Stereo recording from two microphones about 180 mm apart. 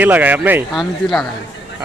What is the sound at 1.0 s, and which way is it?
Speech, centre (ahead or behind).